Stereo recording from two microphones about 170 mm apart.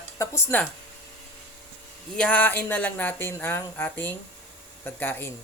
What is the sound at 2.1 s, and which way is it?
Speech, 5° left (ahead or behind).